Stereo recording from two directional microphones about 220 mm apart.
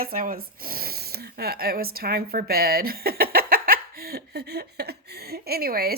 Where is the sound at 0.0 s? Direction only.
40° right (ahead or behind).